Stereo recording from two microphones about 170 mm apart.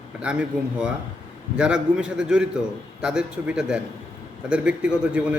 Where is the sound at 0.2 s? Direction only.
5° right (ahead or behind).